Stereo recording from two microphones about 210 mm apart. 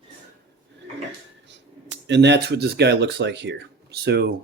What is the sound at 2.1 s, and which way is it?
Speech, 55° right (ahead or behind).